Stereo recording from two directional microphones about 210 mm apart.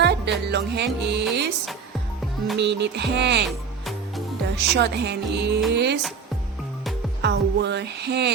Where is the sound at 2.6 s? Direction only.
55° right (ahead or behind).